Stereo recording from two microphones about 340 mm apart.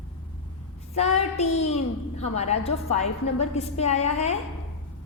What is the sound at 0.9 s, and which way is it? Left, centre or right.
A woman's voice, centre.